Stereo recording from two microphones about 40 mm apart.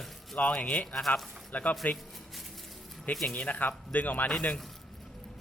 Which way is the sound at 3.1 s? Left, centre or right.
Left.